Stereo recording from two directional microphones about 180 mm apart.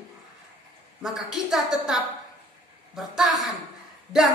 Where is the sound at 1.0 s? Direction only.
Centre (ahead or behind).